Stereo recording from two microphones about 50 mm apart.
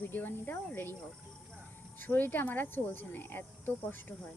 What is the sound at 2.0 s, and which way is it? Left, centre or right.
Speech, left.